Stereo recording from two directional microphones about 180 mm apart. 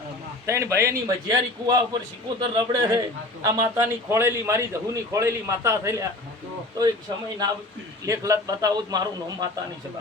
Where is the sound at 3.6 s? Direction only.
15° right (ahead or behind).